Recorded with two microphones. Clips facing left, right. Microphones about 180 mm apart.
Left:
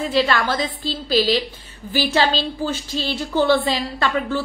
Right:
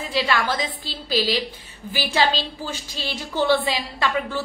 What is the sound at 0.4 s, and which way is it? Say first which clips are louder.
A woman's voice: left 3 dB; 10° right (ahead or behind).